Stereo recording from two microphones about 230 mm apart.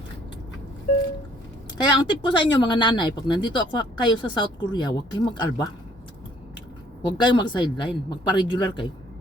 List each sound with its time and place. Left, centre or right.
2.0 s speech: centre
7.0 s speech: centre